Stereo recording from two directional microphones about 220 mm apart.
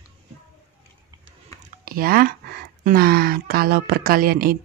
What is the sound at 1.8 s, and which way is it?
Speech, 40° right (ahead or behind).